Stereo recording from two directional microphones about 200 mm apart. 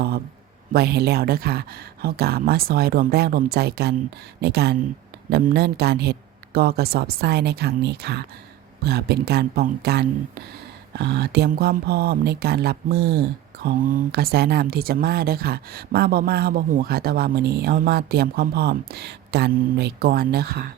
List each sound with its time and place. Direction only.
0.7 s speech: 55° right (ahead or behind)